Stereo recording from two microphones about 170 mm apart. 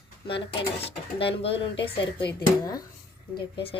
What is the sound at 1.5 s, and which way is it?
Speech, 90° left.